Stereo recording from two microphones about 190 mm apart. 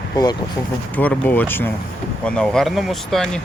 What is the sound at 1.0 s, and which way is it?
Speech, 10° left (ahead or behind).